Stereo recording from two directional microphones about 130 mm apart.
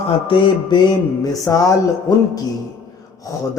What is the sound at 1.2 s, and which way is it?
Speech, 25° left (ahead or behind).